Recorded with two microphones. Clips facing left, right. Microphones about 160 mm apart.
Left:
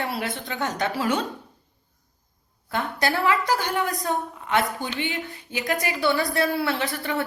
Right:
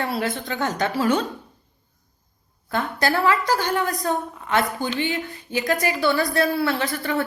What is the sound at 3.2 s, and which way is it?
Speech, 20° left (ahead or behind).